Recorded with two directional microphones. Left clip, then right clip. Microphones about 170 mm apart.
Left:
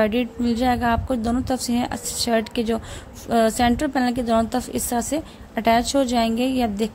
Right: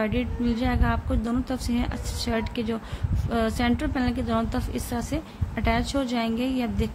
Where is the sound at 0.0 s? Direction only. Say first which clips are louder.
Left 6 dB; 30° left (ahead or behind).